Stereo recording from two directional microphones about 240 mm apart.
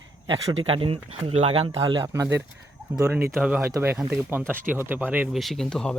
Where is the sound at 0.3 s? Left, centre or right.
Centre.